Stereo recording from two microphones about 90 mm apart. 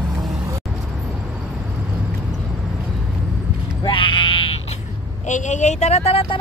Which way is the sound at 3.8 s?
65° left (ahead or behind).